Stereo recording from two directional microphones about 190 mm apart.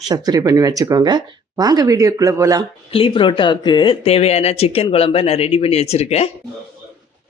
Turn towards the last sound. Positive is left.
turn(degrees=35)  # may be behind; listen again after turning